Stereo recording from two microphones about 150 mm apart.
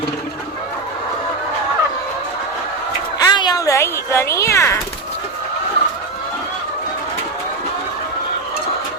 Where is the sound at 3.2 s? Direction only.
30° left (ahead or behind).